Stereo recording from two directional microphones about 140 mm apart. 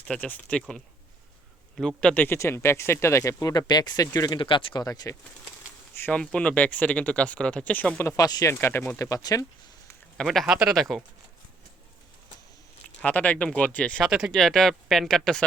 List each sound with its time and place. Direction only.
0.1 s speech: 10° left (ahead or behind)
1.7 s speech: 5° left (ahead or behind); by 5.1 s 25° left (ahead or behind)
6.0 s speech: 10° left (ahead or behind); by 9.5 s 25° left (ahead or behind)
10.2 s speech: centre (ahead or behind)
13.0 s speech: 10° left (ahead or behind)
14.1 s speech: 5° right (ahead or behind)